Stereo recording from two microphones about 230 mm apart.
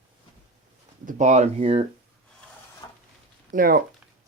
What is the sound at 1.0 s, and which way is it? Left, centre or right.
Speech, right.